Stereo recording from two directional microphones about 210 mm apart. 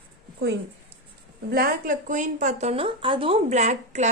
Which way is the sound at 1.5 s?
45° right (ahead or behind).